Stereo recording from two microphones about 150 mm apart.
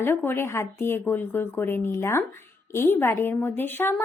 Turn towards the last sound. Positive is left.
turn(degrees=15)  # may be behind; listen again after turning